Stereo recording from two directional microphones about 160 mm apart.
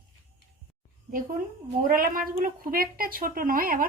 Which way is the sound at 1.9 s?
65° right (ahead or behind).